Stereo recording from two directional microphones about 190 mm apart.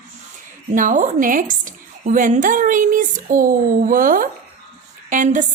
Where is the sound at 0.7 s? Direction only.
45° right (ahead or behind).